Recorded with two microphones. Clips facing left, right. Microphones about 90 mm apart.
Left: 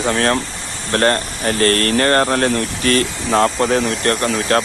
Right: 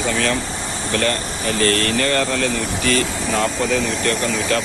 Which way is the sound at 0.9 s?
45° left (ahead or behind).